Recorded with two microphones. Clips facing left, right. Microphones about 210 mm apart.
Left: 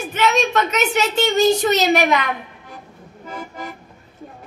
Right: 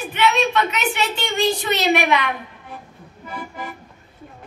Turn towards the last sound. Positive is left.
turn(degrees=40)  # may be behind; listen again after turning